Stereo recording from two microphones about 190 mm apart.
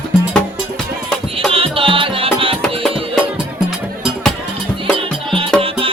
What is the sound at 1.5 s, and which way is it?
Music, 30° right (ahead or behind).